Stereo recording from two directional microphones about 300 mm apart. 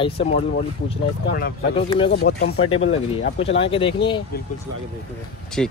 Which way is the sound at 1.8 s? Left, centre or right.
Centre.